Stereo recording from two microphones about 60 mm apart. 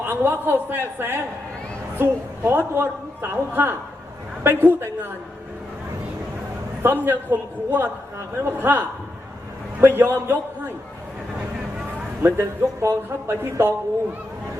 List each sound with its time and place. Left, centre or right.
0.0 s a man's voice: right
6.8 s a man's voice: right
9.8 s a man's voice: right
12.2 s a man's voice: right